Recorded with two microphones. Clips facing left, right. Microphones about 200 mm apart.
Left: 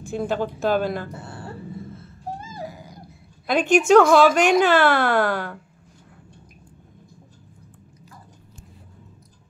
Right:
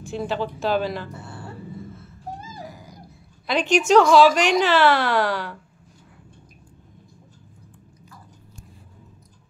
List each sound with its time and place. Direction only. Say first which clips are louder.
0.0 s speech: left 2 dB; 50° left (ahead or behind)
3.4 s speech: left 3 dB; 55° left (ahead or behind)